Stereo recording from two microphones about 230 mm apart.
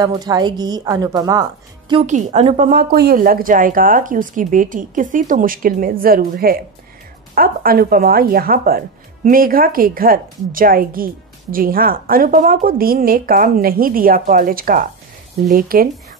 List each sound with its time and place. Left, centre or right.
0.0 s a woman's voice: centre; by 15.9 s right